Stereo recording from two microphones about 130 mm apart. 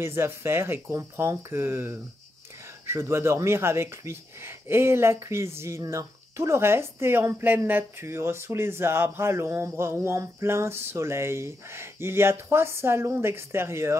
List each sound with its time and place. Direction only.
0.0 s speech: 20° right (ahead or behind)